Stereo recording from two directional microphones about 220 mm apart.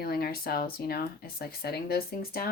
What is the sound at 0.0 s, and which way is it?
Speech, 45° left (ahead or behind).